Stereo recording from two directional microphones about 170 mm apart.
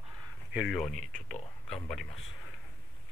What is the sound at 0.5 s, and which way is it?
Speech, centre (ahead or behind).